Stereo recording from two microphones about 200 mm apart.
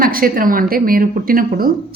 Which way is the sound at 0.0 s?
45° right (ahead or behind).